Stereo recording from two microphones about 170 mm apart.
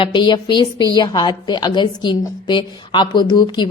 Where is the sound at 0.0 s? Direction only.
30° left (ahead or behind).